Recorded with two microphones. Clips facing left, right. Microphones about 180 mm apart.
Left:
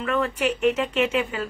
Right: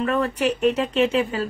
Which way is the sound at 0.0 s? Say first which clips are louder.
Right 2 dB; 40° right (ahead or behind).